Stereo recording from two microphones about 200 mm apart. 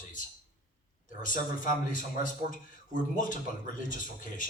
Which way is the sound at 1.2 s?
40° left (ahead or behind).